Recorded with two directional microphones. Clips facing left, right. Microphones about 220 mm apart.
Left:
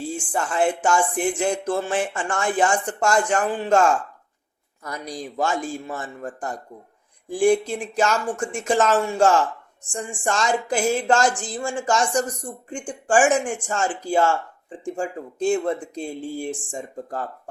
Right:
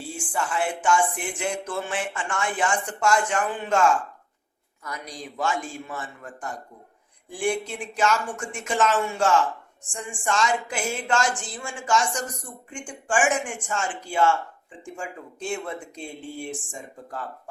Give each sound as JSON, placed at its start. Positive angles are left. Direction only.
{"t": 0.3, "sound": "speech", "side_deg": 40}
{"t": 5.4, "sound": "speech", "side_deg": 40}